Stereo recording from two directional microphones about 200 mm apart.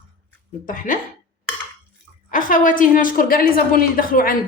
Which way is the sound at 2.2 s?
40° left (ahead or behind).